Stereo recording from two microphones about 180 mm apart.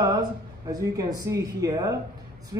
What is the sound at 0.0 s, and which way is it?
A man's voice, 20° right (ahead or behind).